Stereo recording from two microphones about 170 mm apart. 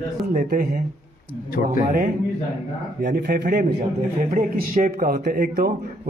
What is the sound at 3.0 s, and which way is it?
A man's voice, 60° right (ahead or behind).